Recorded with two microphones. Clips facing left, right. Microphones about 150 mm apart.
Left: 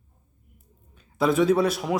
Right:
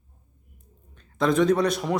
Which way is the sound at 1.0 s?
5° left (ahead or behind).